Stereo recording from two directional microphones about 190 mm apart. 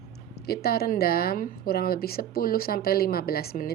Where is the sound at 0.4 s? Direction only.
55° left (ahead or behind).